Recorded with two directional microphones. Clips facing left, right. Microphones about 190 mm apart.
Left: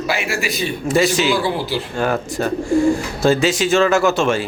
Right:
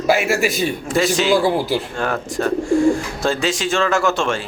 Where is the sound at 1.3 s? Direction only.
45° right (ahead or behind).